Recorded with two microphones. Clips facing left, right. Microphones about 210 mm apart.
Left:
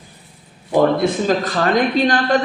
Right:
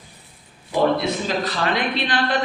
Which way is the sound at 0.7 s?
50° left (ahead or behind).